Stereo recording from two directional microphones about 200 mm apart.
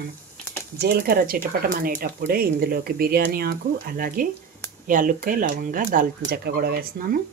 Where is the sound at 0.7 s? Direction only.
50° right (ahead or behind).